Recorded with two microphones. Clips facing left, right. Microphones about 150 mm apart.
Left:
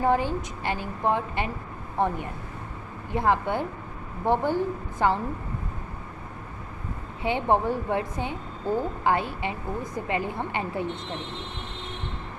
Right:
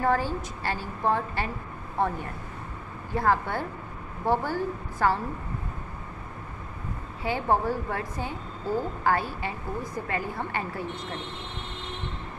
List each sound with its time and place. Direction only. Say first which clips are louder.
0.0 s a woman's voice: left 2 dB; 20° left (ahead or behind)
3.1 s a woman's voice: left 1 dB; 20° left (ahead or behind)
7.2 s a woman's voice: left 2 dB; 20° left (ahead or behind)